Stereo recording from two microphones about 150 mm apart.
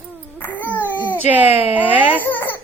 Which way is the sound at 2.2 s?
15° left (ahead or behind).